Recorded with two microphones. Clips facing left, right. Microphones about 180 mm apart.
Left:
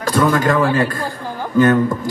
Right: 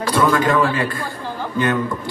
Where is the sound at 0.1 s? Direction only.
45° left (ahead or behind).